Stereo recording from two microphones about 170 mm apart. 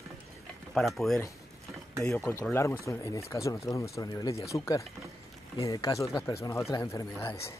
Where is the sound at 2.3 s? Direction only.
15° left (ahead or behind).